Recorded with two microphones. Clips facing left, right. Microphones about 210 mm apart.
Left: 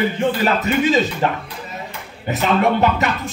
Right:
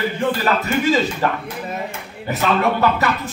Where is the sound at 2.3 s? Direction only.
20° left (ahead or behind).